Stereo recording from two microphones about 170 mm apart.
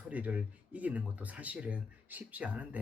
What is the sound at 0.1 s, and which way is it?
Speech, 10° right (ahead or behind).